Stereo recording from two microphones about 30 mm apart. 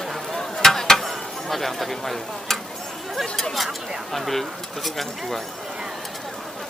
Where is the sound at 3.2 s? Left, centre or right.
Centre.